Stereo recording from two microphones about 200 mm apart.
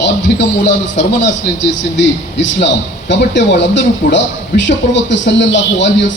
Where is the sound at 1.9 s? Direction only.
65° left (ahead or behind).